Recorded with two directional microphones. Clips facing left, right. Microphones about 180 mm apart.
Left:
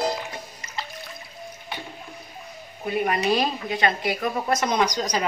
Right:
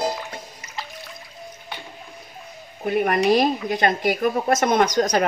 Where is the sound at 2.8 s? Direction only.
55° right (ahead or behind).